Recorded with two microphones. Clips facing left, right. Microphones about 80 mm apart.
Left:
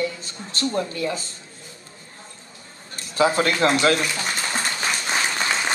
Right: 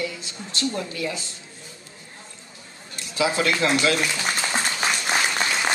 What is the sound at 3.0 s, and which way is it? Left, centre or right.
Speech, left.